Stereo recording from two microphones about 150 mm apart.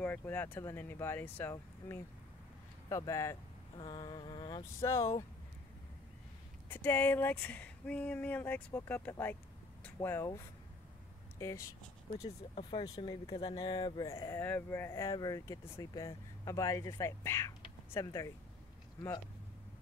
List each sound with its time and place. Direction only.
0.0 s speech: 10° left (ahead or behind)
3.7 s speech: 35° left (ahead or behind)
6.7 s speech: 15° left (ahead or behind)
12.2 s speech: 40° left (ahead or behind); by 18.3 s 20° left (ahead or behind)